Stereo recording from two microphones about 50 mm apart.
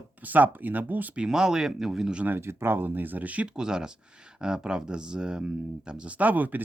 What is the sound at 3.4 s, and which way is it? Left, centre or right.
Speech, centre.